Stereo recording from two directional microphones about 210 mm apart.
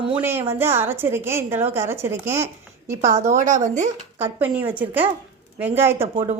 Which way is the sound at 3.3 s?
35° right (ahead or behind).